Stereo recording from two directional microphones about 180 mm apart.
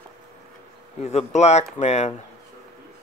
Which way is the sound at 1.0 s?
35° left (ahead or behind).